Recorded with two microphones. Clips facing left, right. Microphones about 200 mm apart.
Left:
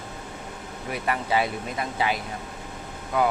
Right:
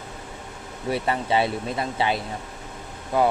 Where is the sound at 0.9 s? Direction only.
30° right (ahead or behind).